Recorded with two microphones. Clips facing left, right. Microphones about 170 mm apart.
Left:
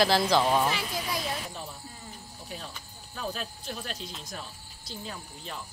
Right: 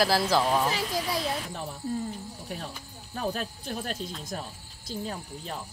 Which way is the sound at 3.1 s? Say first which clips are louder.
Right 4 dB; 50° right (ahead or behind).